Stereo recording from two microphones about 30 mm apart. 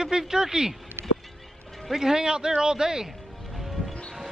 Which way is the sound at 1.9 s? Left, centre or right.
Centre.